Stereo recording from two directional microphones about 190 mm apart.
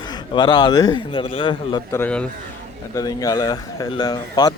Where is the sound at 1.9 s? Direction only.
10° left (ahead or behind).